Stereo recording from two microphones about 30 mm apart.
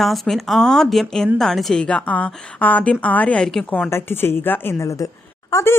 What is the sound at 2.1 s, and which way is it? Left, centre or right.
Speech, left.